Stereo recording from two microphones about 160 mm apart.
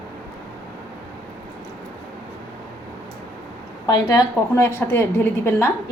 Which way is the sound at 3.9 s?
20° left (ahead or behind).